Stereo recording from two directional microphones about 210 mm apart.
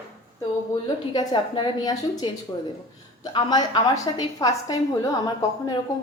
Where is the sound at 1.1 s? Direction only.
20° left (ahead or behind).